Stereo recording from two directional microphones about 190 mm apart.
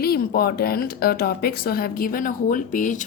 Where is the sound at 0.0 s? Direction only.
55° left (ahead or behind).